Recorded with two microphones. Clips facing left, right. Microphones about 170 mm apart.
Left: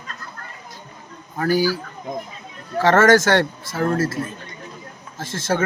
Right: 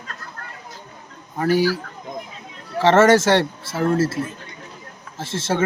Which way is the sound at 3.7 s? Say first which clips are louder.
Right 1 dB; 5° right (ahead or behind).